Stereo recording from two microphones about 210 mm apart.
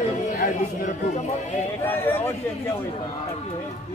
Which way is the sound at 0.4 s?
35° left (ahead or behind).